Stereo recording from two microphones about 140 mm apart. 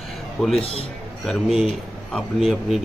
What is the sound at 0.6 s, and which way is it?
Speech, 45° left (ahead or behind).